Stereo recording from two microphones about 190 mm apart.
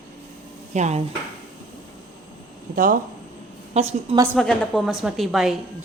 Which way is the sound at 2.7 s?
45° right (ahead or behind).